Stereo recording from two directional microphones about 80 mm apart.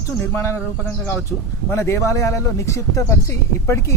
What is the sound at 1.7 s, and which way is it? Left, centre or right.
A man's voice, left.